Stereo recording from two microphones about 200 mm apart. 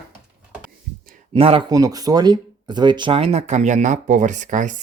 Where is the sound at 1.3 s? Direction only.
25° right (ahead or behind).